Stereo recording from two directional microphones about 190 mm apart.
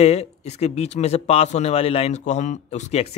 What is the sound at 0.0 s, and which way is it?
Speech, 35° left (ahead or behind).